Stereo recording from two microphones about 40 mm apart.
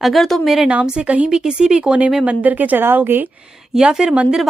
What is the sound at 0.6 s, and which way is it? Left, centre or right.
Speech, right.